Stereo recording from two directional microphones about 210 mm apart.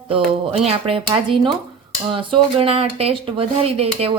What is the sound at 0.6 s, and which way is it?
Speech, 25° right (ahead or behind).